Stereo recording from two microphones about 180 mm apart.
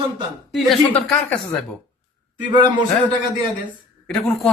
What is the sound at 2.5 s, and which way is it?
Speech, 25° right (ahead or behind).